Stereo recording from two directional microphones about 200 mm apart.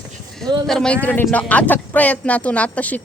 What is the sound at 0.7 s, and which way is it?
Speech, 5° left (ahead or behind).